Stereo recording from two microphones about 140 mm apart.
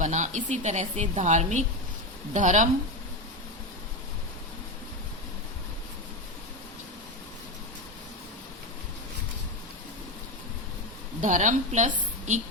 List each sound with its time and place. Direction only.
0.0 s a woman's voice: 60° right (ahead or behind)
11.2 s a woman's voice: 65° right (ahead or behind)